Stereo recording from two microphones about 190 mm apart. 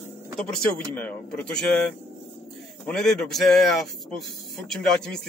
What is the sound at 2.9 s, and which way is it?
Speech, 5° left (ahead or behind).